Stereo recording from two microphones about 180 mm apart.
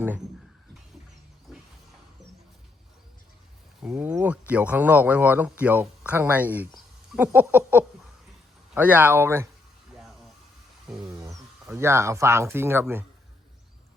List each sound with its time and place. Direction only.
3.8 s speech: 5° right (ahead or behind)
11.0 s a sound: 20° right (ahead or behind)
11.7 s speech: 15° right (ahead or behind)